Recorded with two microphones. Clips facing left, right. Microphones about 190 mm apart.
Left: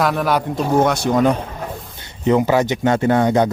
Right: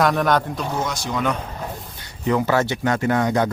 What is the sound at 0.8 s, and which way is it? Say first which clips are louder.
Speech: left 12 dB; 60° left (ahead or behind).